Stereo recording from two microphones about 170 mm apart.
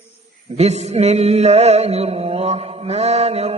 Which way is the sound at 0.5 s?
40° right (ahead or behind).